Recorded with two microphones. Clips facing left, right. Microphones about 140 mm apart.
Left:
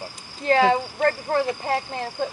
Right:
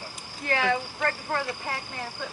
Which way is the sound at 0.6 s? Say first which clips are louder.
Left 7 dB; 30° left (ahead or behind).